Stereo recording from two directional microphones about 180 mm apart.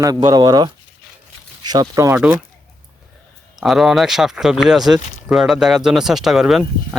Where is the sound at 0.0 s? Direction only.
20° right (ahead or behind).